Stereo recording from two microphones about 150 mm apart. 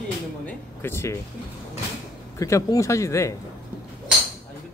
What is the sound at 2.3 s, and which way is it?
Speech, 20° left (ahead or behind).